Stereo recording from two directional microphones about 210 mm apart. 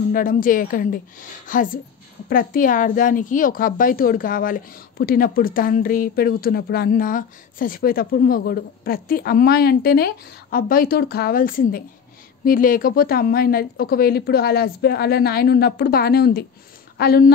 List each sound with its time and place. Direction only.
0.1 s a woman's voice: 40° left (ahead or behind)